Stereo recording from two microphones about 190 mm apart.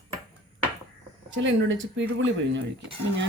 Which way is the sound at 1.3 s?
80° right.